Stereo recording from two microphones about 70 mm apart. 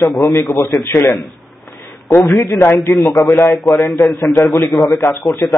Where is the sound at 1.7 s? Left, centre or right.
Left.